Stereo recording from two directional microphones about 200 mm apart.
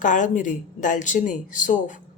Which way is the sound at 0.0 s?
40° left (ahead or behind).